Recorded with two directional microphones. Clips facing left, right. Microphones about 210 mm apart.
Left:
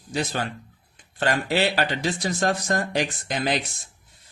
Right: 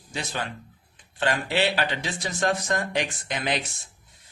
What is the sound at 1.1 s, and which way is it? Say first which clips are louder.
A man's voice: left 2 dB; 40° left (ahead or behind).